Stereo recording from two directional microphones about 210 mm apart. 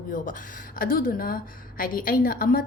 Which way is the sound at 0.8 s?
40° left (ahead or behind).